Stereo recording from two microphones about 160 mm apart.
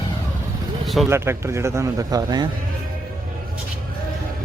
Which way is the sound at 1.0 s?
15° right (ahead or behind).